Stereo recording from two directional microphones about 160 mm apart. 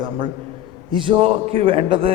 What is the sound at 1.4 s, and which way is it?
Speech, 35° right (ahead or behind).